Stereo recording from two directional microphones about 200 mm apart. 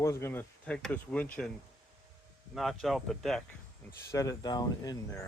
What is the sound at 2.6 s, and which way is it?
Speech, centre (ahead or behind).